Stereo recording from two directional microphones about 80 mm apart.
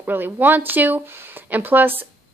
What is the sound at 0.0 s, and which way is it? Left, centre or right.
Speech, right.